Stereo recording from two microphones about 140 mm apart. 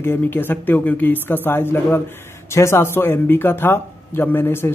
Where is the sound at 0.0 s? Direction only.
15° left (ahead or behind).